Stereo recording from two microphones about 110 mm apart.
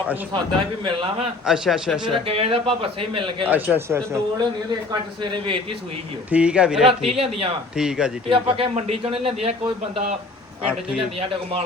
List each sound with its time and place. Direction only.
0.3 s a man's voice: 45° right (ahead or behind)
1.5 s a man's voice: 5° right (ahead or behind)
2.2 s a man's voice: 60° right (ahead or behind)
3.5 s speech: 20° right (ahead or behind)
4.9 s a man's voice: 45° right (ahead or behind)
6.3 s speech: 10° right (ahead or behind)
7.1 s a man's voice: 60° right (ahead or behind)
7.8 s speech: 5° right (ahead or behind)
8.3 s a man's voice: 55° right (ahead or behind)
10.7 s speech: 10° right (ahead or behind)
11.2 s a man's voice: 60° right (ahead or behind)